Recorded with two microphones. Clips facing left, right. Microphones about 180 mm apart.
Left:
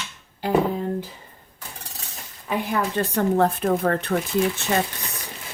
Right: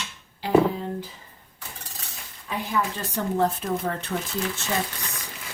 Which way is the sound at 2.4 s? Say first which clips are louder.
Left 3 dB; 60° left (ahead or behind).